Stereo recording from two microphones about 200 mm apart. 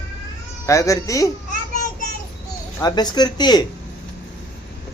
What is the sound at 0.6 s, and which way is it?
Speech, 15° left (ahead or behind).